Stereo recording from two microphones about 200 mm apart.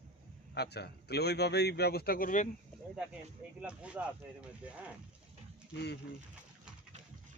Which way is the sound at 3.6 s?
5° right (ahead or behind).